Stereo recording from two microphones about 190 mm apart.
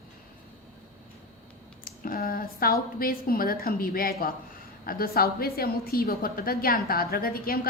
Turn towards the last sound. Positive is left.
turn(degrees=50)  # may be behind; listen again after turning